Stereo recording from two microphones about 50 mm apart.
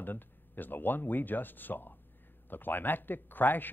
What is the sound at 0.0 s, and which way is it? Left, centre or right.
Speech, left.